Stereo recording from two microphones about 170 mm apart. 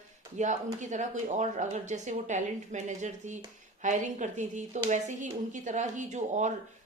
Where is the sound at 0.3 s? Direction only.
45° right (ahead or behind).